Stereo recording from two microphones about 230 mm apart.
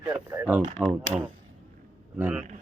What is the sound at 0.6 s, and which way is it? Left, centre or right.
Speech, right.